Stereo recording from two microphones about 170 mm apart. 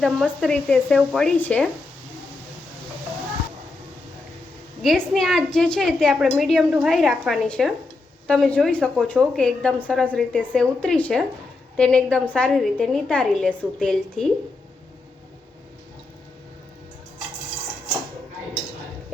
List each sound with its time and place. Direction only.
0.0 s a woman's voice: 5° left (ahead or behind)
4.8 s a woman's voice: centre (ahead or behind)